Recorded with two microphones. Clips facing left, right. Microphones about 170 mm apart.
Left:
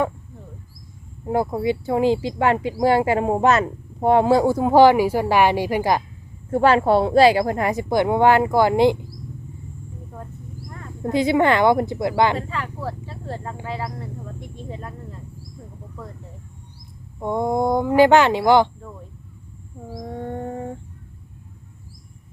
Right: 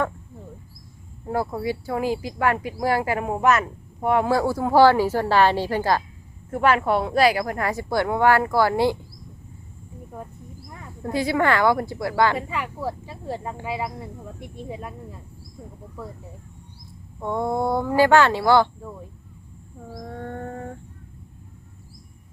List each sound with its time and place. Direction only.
1.3 s speech: 20° left (ahead or behind)
6.5 s speech: 30° left (ahead or behind)
10.7 s a sound: 10° right (ahead or behind)
11.0 s speech: 20° left (ahead or behind)
12.4 s speech: 10° right (ahead or behind)
17.2 s speech: 15° left (ahead or behind)
19.9 s speech: 15° left (ahead or behind)